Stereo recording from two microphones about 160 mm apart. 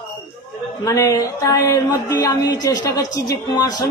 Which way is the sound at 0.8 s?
20° left (ahead or behind).